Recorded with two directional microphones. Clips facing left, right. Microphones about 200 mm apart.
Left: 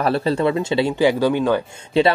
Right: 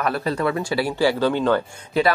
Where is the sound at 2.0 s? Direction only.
30° left (ahead or behind).